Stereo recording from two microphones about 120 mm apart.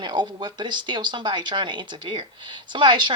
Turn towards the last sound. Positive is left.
turn(degrees=-40)  # may be behind; listen again after turning